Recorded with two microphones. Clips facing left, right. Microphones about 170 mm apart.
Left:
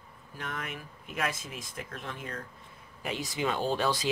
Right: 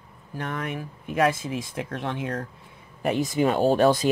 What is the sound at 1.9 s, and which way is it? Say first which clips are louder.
Speech: right 11 dB; 75° right (ahead or behind).